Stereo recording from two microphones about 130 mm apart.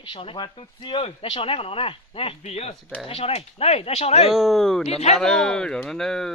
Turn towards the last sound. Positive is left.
turn(degrees=5)  # may be behind; listen again after turning